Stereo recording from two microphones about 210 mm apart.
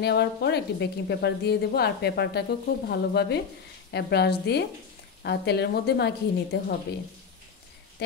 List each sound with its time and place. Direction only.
0.0 s a woman's voice: 50° left (ahead or behind)